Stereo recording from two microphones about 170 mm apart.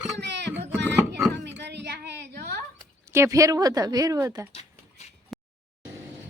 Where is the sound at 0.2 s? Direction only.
90° right.